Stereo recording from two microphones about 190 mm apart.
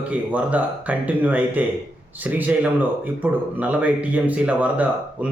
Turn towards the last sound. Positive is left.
turn(degrees=-10)  # may be behind; listen again after turning